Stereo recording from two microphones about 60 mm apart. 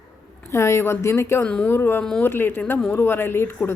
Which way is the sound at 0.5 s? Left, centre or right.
Left.